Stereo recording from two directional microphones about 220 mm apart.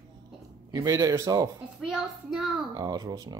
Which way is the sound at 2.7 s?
15° right (ahead or behind).